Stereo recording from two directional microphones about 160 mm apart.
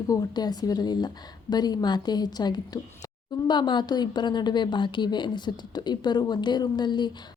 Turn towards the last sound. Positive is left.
turn(degrees=25)  # may be behind; listen again after turning